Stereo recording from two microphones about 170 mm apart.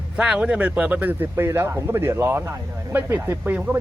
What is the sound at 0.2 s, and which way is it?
Speech, 5° right (ahead or behind).